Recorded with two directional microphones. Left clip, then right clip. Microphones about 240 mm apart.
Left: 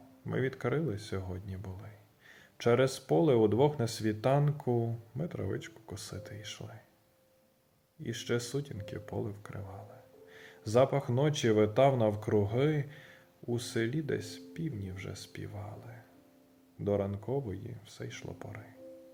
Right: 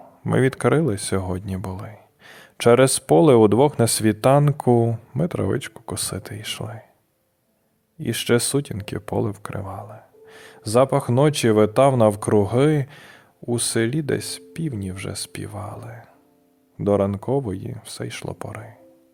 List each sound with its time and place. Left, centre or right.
0.3 s speech: right
8.0 s speech: right